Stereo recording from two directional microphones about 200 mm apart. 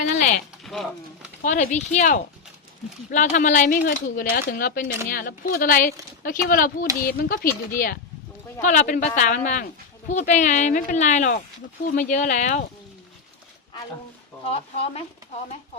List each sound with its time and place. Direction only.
0.2 s speech: 40° left (ahead or behind)
0.6 s speech: centre (ahead or behind)
1.4 s speech: 35° left (ahead or behind)
14.4 s speech: 30° left (ahead or behind)